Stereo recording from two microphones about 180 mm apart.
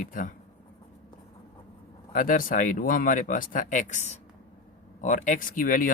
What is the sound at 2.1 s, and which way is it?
Speech, 50° left (ahead or behind).